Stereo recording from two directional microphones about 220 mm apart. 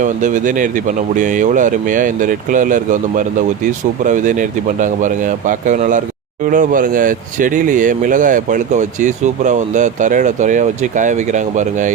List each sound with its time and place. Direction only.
0.0 s speech: 35° right (ahead or behind)